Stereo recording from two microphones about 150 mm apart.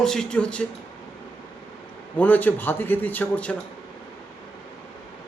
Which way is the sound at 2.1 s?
10° left (ahead or behind).